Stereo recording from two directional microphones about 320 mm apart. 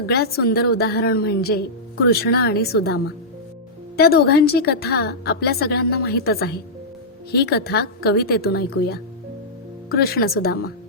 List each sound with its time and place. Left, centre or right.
0.0 s a woman's voice: left